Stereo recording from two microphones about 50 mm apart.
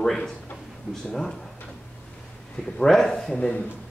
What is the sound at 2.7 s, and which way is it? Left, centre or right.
Speech, centre.